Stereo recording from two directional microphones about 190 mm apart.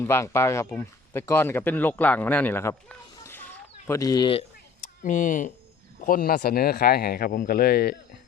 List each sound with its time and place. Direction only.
0.0 s speech: 15° left (ahead or behind)
4.8 s speech: 40° left (ahead or behind)